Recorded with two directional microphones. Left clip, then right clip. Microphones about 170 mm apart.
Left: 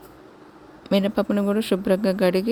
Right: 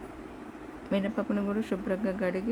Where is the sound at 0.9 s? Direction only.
55° left (ahead or behind).